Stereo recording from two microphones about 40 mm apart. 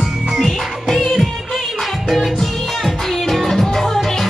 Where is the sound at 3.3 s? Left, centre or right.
Centre.